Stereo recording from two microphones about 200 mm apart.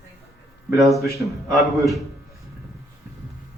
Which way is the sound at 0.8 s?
Centre (ahead or behind).